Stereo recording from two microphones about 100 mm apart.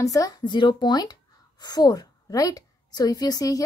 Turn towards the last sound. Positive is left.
turn(degrees=40)  # may be behind; listen again after turning